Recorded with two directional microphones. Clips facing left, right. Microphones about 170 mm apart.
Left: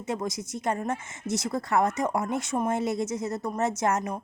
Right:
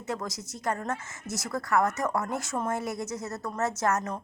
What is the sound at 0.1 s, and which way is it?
Speech, 20° left (ahead or behind).